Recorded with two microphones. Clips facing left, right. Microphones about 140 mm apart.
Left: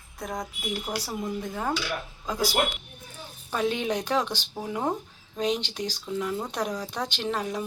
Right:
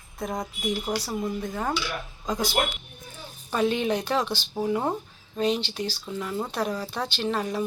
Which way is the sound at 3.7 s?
10° left (ahead or behind).